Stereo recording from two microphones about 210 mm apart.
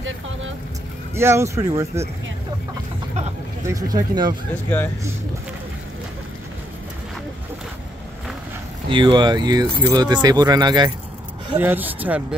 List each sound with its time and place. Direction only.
1.1 s speech: 10° right (ahead or behind)
3.6 s speech: 15° right (ahead or behind)
8.8 s speech: 25° right (ahead or behind)
11.5 s speech: 10° right (ahead or behind)